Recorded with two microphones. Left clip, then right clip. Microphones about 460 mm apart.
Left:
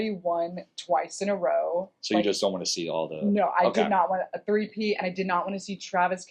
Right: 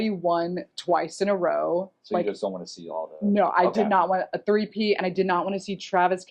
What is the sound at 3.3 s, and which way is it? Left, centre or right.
Speech, right.